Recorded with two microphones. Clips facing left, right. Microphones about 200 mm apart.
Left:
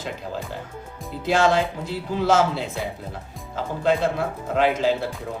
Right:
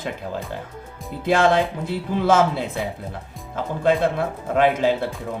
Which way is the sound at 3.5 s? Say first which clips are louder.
Right 2 dB; 55° right (ahead or behind).